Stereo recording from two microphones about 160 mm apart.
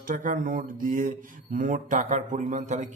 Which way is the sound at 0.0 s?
60° right (ahead or behind).